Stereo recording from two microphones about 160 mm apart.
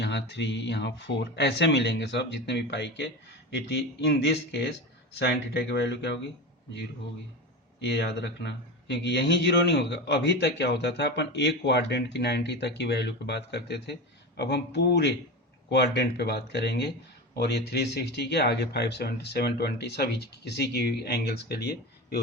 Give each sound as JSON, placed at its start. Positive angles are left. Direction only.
{"t": 0.0, "sound": "speech", "side_deg": 90}
{"t": 7.8, "sound": "speech", "side_deg": 90}